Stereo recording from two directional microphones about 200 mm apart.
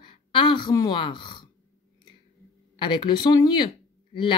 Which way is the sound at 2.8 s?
20° left (ahead or behind).